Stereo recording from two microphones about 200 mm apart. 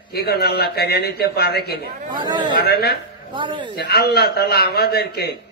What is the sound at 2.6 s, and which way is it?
Speech, 50° left (ahead or behind).